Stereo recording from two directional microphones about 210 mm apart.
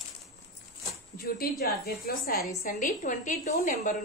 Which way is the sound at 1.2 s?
45° left (ahead or behind).